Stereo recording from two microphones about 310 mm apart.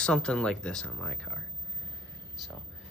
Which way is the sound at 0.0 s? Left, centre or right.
Centre.